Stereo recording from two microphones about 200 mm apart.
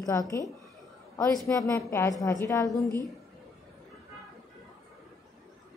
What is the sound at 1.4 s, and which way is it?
A woman's voice, 15° left (ahead or behind).